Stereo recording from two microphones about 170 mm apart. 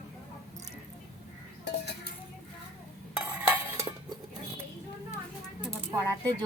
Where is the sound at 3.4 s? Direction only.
10° right (ahead or behind).